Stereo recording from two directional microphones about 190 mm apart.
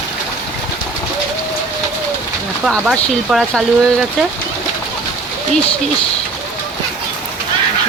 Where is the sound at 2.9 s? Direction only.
5° left (ahead or behind).